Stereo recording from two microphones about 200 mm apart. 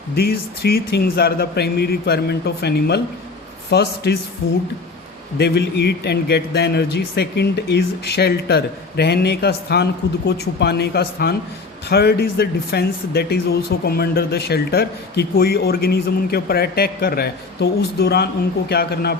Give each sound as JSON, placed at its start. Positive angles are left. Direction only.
{"t": 0.2, "sound": "a man's voice", "side_deg": 50}
{"t": 5.4, "sound": "a man's voice", "side_deg": 55}